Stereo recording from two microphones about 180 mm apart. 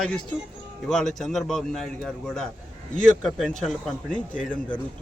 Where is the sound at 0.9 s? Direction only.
Centre (ahead or behind).